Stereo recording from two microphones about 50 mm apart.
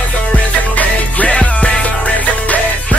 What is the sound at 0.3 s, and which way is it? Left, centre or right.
Music, left.